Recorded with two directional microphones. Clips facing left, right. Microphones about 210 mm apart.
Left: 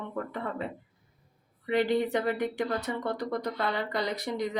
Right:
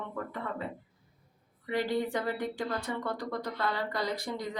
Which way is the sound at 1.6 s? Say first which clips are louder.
Left 4 dB; 20° left (ahead or behind).